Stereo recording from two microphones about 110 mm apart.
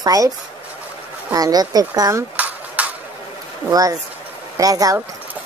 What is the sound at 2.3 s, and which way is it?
Dishes, 15° right (ahead or behind).